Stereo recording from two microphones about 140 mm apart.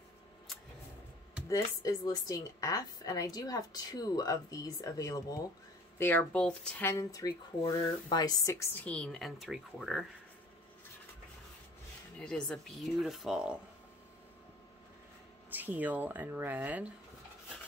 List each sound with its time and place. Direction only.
1.5 s a woman's voice: 25° left (ahead or behind)
5.9 s speech: 15° left (ahead or behind)
6.9 s a woman's voice: 25° left (ahead or behind)
8.8 s speech: 5° left (ahead or behind)
12.2 s speech: 5° left (ahead or behind)
15.5 s speech: 10° right (ahead or behind)